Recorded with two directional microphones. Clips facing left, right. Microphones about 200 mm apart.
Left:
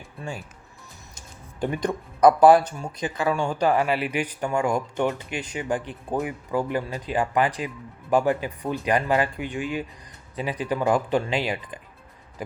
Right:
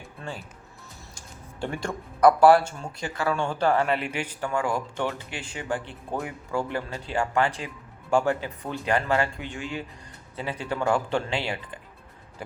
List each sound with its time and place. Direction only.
1.6 s speech: 20° left (ahead or behind)